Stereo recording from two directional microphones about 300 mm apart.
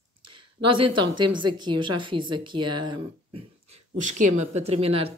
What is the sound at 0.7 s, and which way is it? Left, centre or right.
A woman's voice, centre.